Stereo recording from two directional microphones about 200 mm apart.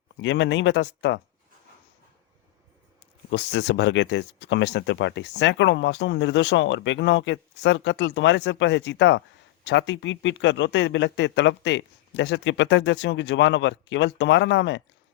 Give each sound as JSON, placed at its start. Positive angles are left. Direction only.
{"t": 0.2, "sound": "speech", "side_deg": 65}
{"t": 3.2, "sound": "speech", "side_deg": 60}